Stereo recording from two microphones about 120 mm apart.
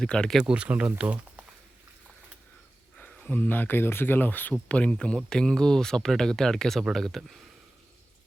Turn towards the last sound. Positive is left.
turn(degrees=0)  # may be behind; listen again after turning